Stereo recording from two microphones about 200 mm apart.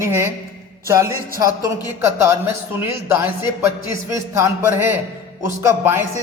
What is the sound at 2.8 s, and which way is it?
A man's voice, 10° right (ahead or behind).